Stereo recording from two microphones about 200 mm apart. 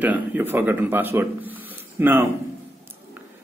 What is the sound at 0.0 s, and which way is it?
Speech, 10° right (ahead or behind).